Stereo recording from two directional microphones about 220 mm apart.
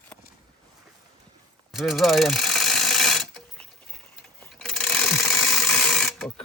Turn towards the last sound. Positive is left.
turn(degrees=0)  # may be behind; listen again after turning